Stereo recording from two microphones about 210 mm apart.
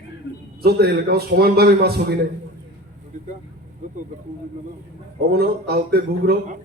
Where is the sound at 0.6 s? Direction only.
50° right (ahead or behind).